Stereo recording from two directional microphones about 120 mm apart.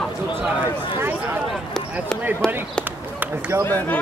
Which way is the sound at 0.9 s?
20° right (ahead or behind).